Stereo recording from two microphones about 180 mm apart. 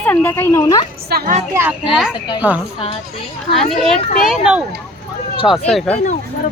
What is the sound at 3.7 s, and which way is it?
Speech, centre (ahead or behind).